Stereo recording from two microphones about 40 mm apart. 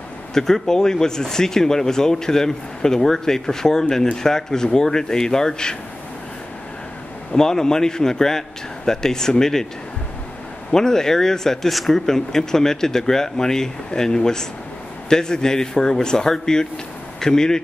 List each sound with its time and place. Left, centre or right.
0.3 s speech: centre
7.3 s speech: centre
10.7 s speech: centre
12.1 s speech: centre